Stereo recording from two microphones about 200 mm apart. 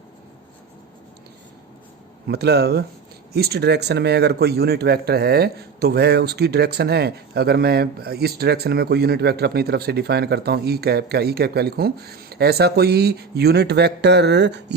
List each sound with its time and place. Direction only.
2.2 s a man's voice: 55° right (ahead or behind)